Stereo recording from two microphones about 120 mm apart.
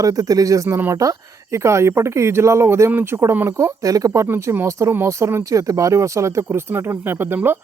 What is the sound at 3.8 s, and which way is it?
Speech, 30° right (ahead or behind).